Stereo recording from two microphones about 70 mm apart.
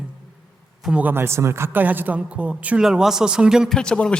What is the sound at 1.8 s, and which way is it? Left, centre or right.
A man's voice, right.